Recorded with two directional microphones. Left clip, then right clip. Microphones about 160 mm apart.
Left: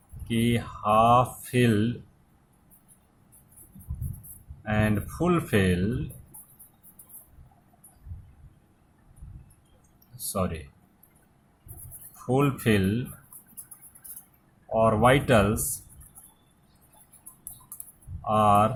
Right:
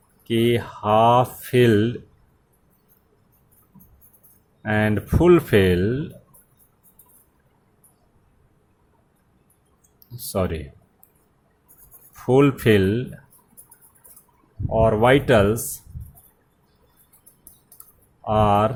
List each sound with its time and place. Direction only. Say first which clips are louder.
0.3 s speech: right 8 dB; 40° right (ahead or behind)
4.6 s speech: right 6 dB; 40° right (ahead or behind)
10.2 s speech: right 6 dB; 35° right (ahead or behind)
12.2 s speech: right 8 dB; 40° right (ahead or behind)
14.7 s speech: right 4 dB; 35° right (ahead or behind)
18.3 s speech: right 2 dB; 40° right (ahead or behind)